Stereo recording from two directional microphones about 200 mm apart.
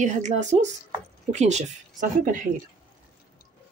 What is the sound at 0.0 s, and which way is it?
Speech, 40° right (ahead or behind).